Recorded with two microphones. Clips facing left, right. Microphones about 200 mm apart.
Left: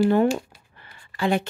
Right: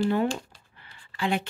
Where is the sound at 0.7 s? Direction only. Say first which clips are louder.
Left 3 dB; 45° left (ahead or behind).